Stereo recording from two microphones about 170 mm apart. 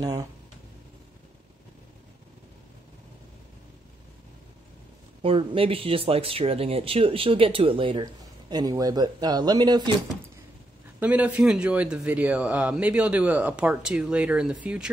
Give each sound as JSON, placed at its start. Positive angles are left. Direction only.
{"t": 0.0, "sound": "speech", "side_deg": -20}
{"t": 5.2, "sound": "speech", "side_deg": -35}
{"t": 11.0, "sound": "a man's voice", "side_deg": -10}